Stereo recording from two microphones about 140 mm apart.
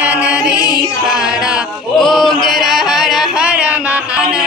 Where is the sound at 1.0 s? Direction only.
5° right (ahead or behind).